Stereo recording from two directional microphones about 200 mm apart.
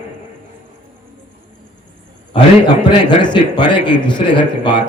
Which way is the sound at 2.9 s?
20° left (ahead or behind).